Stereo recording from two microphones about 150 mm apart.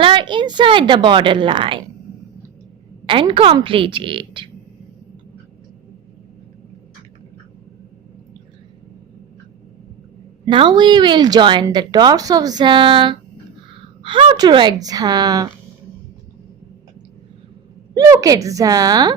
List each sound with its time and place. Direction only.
0.0 s speech: 35° right (ahead or behind)
3.1 s speech: 35° right (ahead or behind)
10.4 s a woman's voice: 30° right (ahead or behind)
17.9 s speech: 25° right (ahead or behind)